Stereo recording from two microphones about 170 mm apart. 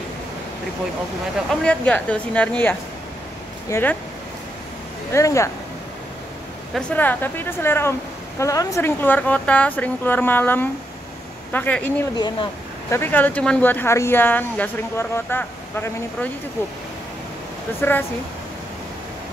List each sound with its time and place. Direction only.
1.5 s speech: 5° left (ahead or behind)
5.1 s speech: 15° left (ahead or behind)
6.7 s speech: 10° left (ahead or behind)
17.7 s speech: 10° left (ahead or behind)